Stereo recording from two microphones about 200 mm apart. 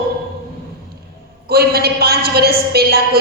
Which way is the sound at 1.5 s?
50° right (ahead or behind).